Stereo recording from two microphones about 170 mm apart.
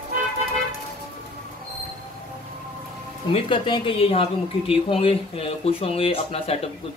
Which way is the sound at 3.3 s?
30° left (ahead or behind).